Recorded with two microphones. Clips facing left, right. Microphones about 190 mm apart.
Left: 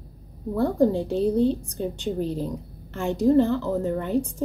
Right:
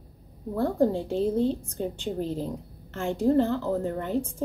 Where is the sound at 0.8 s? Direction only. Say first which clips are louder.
Left 3 dB; 20° left (ahead or behind).